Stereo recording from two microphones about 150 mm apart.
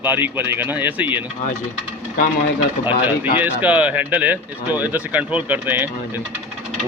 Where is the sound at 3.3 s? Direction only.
10° right (ahead or behind).